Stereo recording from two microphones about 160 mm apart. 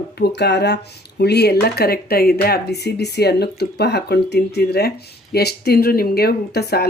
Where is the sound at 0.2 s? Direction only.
90° left.